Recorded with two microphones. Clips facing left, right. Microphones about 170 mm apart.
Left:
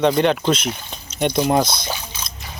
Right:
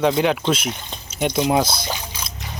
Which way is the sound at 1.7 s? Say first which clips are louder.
Even; 10° right (ahead or behind).